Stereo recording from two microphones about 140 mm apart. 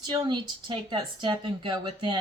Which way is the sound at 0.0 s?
35° right (ahead or behind).